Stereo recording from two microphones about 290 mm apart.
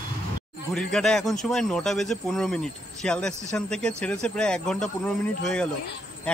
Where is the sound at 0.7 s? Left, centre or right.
Centre.